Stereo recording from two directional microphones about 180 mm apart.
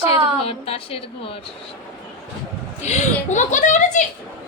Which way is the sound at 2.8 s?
40° left (ahead or behind).